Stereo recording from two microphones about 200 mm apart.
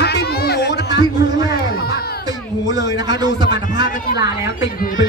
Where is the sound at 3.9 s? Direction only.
50° left (ahead or behind).